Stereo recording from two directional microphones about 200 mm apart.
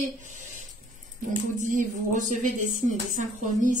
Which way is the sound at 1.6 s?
40° right (ahead or behind).